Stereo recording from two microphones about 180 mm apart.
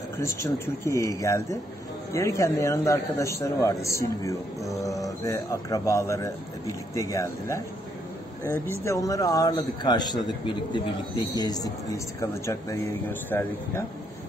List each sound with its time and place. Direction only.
0.2 s a man's voice: 15° left (ahead or behind)
8.8 s a man's voice: 15° left (ahead or behind)